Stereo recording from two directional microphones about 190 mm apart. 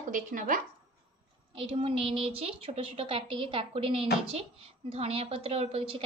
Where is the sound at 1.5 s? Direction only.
25° right (ahead or behind).